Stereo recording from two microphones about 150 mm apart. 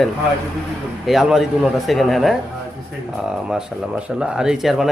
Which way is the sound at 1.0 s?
Centre (ahead or behind).